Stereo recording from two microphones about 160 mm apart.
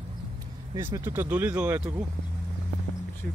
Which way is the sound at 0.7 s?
15° right (ahead or behind).